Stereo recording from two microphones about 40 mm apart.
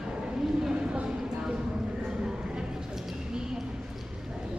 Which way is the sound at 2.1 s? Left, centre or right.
Centre.